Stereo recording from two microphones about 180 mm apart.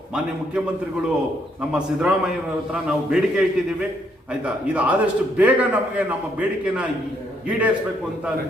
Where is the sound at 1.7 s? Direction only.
5° right (ahead or behind).